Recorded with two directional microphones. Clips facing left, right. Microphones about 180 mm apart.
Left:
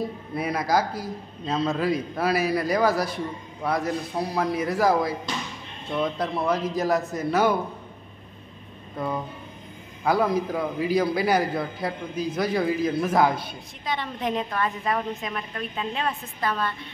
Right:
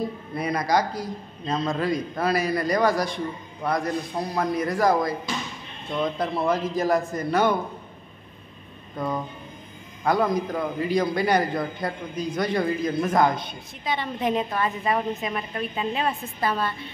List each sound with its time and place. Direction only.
0.0 s a man's voice: 5° left (ahead or behind)
8.9 s a man's voice: 5° left (ahead or behind)